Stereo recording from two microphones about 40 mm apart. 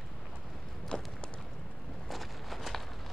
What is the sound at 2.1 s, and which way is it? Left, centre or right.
Walk, centre.